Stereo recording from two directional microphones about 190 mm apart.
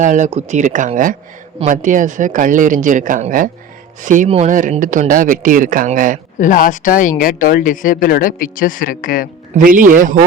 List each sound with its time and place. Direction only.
0.0 s speech: 40° right (ahead or behind)
6.4 s speech: 45° left (ahead or behind)
9.6 s speech: 45° right (ahead or behind)